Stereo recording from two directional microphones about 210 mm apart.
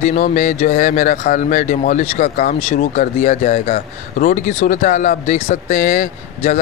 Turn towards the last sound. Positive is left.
turn(degrees=35)  # may be behind; listen again after turning